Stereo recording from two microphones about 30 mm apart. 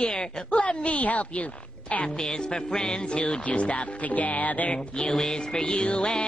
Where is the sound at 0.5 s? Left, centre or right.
Left.